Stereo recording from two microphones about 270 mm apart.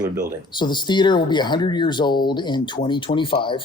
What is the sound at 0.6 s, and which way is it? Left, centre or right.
Speech, centre.